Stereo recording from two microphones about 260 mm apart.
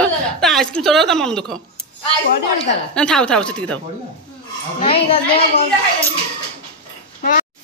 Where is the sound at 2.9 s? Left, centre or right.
Centre.